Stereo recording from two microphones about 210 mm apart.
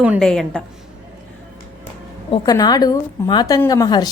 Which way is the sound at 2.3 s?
20° left (ahead or behind).